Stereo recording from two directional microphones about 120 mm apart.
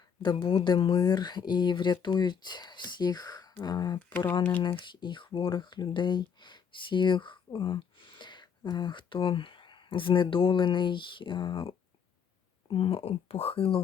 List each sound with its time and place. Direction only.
0.2 s speech: 45° left (ahead or behind)